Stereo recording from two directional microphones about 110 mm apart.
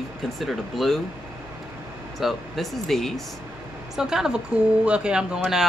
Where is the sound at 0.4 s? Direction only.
Centre (ahead or behind).